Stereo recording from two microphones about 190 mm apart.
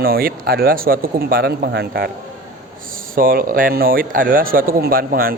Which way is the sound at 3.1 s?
50° right (ahead or behind).